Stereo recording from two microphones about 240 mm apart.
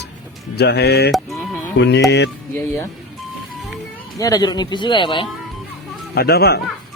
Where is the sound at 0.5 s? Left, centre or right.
Left.